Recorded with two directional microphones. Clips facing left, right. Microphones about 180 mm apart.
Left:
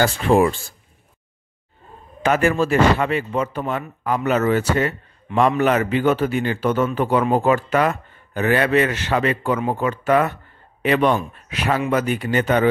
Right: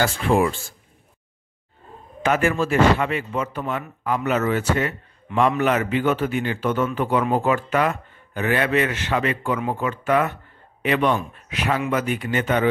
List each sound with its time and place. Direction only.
0.0 s a man's voice: 35° left (ahead or behind)
2.2 s a man's voice: 35° left (ahead or behind)